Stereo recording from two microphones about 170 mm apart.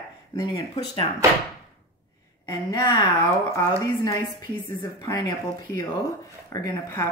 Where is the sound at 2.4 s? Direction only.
20° left (ahead or behind).